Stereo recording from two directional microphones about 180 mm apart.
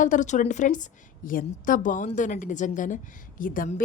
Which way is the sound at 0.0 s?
45° left (ahead or behind).